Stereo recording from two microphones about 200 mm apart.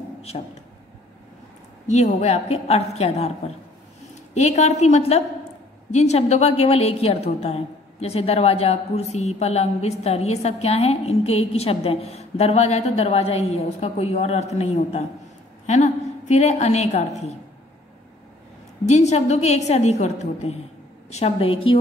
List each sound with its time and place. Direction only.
0.3 s a woman's voice: 35° left (ahead or behind)
1.9 s a woman's voice: 35° left (ahead or behind)
18.9 s a woman's voice: 35° left (ahead or behind)